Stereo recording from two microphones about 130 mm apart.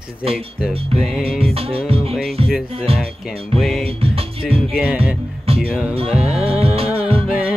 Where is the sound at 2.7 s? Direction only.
50° right (ahead or behind).